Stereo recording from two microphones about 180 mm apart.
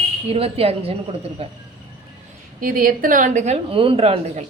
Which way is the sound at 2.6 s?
55° right (ahead or behind).